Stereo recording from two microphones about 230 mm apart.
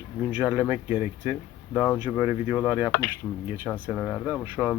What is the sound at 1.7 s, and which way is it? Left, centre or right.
Speech, centre.